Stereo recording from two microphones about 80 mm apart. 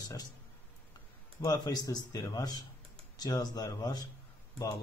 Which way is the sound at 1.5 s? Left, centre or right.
Left.